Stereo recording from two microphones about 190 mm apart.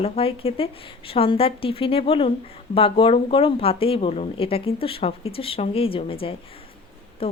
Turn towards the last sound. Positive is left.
turn(degrees=30)  # may be behind; listen again after turning